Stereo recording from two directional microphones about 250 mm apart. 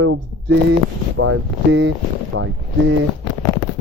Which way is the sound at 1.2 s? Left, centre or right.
Right.